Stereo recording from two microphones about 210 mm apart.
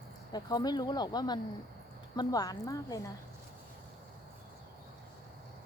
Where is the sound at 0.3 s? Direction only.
20° left (ahead or behind).